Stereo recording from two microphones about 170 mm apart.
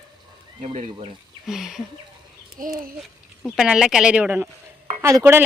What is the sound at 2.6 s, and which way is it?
Speech, 50° right (ahead or behind).